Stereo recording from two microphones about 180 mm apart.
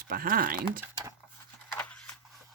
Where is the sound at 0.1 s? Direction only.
55° right (ahead or behind).